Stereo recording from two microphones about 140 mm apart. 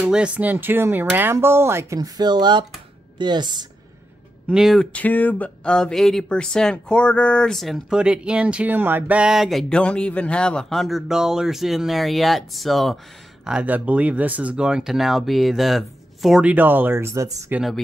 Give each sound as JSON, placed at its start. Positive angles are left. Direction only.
{"t": 0.0, "sound": "a woman's voice", "side_deg": -10}
{"t": 4.5, "sound": "speech", "side_deg": -5}
{"t": 4.9, "sound": "speech", "side_deg": 10}